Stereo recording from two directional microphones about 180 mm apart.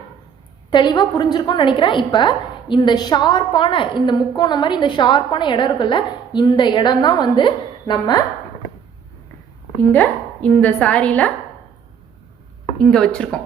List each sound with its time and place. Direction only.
0.7 s a woman's voice: 25° left (ahead or behind)
9.9 s a woman's voice: 10° left (ahead or behind)
12.8 s speech: 5° left (ahead or behind)